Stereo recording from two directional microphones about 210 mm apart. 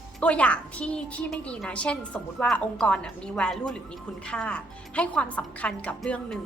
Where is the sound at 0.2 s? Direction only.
5° left (ahead or behind).